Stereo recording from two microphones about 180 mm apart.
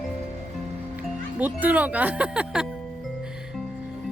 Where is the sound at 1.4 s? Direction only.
10° right (ahead or behind).